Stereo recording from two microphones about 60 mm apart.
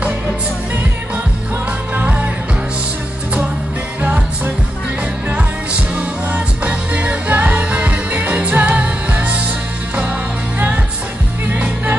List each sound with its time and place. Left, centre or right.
2.0 s music: right
5.3 s music: right
11.5 s music: right